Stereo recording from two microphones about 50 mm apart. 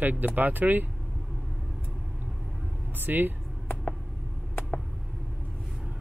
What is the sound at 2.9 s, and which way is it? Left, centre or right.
Speech, right.